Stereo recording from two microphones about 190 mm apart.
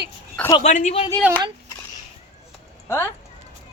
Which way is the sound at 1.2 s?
10° right (ahead or behind).